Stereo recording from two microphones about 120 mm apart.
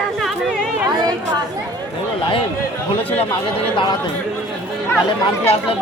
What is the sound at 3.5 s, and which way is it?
Speech, 40° left (ahead or behind).